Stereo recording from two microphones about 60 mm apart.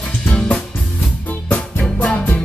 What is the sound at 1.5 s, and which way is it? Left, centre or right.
Music, centre.